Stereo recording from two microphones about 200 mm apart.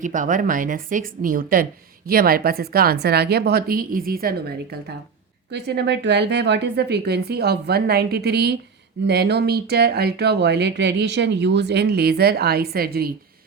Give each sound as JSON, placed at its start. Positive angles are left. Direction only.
{"t": 0.0, "sound": "speech", "side_deg": -40}